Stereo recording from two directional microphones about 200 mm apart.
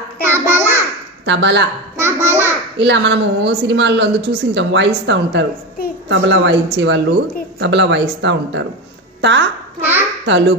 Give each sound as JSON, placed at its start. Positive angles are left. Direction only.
{"t": 0.2, "sound": "a sound", "side_deg": -10}
{"t": 1.2, "sound": "speech", "side_deg": -60}
{"t": 2.0, "sound": "babbling", "side_deg": -15}
{"t": 2.8, "sound": "a woman's voice", "side_deg": -60}
{"t": 9.8, "sound": "a sound", "side_deg": -10}
{"t": 10.2, "sound": "a child's voice", "side_deg": -65}